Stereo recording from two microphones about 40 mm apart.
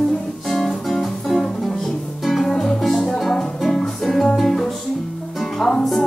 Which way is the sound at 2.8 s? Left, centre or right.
Centre.